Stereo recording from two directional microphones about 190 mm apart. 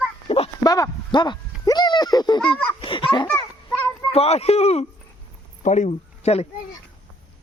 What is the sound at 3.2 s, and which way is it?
Children playing, 10° left (ahead or behind).